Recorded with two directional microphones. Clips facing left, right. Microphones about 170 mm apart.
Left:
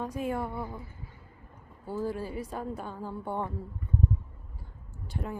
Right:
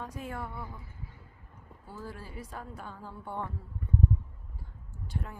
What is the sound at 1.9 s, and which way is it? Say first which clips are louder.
A woman's voice: left 11 dB; 25° left (ahead or behind).